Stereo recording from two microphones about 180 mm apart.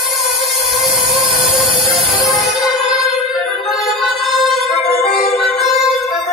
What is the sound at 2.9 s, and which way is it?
Music, centre (ahead or behind).